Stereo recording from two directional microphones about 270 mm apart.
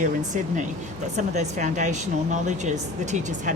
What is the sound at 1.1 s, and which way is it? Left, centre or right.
Speech, right.